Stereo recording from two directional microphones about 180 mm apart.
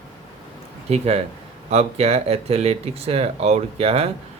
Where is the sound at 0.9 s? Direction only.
35° right (ahead or behind).